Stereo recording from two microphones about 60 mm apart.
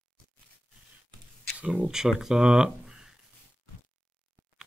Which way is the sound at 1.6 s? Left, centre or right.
Right.